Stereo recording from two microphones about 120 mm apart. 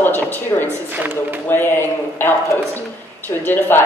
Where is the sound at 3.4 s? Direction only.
15° left (ahead or behind).